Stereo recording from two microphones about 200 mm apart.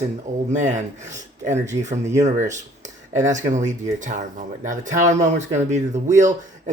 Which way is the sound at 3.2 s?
40° right (ahead or behind).